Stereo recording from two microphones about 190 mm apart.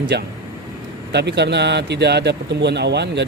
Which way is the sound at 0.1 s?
60° right (ahead or behind).